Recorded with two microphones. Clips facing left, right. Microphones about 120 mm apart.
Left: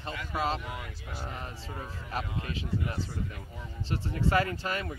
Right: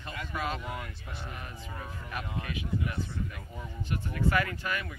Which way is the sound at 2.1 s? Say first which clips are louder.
Left 2 dB; 30° left (ahead or behind).